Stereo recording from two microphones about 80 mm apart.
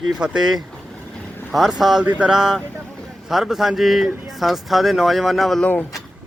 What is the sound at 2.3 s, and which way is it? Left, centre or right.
A man's voice, centre.